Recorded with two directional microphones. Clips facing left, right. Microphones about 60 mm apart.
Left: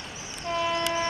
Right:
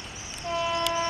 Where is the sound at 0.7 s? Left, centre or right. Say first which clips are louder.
Even; left.